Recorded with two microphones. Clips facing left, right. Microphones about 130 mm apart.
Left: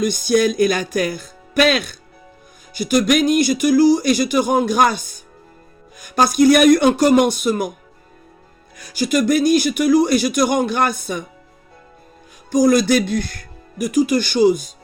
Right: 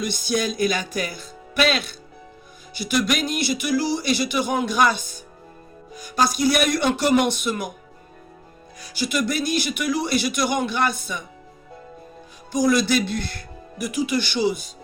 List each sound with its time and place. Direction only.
0.0 s a man's voice: 50° left (ahead or behind)
6.0 s a man's voice: 50° left (ahead or behind)
8.8 s a man's voice: 45° left (ahead or behind)
12.5 s a man's voice: 45° left (ahead or behind)